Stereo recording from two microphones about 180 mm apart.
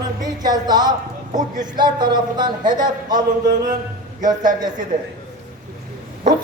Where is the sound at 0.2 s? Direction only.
20° right (ahead or behind).